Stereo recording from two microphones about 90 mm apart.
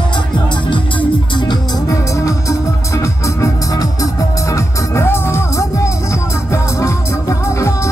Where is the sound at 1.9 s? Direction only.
35° left (ahead or behind).